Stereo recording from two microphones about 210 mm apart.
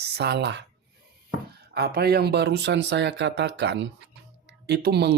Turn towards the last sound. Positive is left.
turn(degrees=-50)  # may be behind; listen again after turning